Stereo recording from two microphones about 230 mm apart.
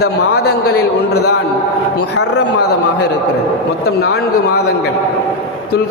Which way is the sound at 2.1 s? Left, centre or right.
Left.